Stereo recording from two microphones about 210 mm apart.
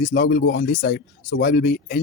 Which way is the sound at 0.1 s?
45° left (ahead or behind).